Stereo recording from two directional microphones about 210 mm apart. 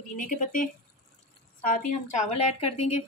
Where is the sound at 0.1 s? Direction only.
40° left (ahead or behind).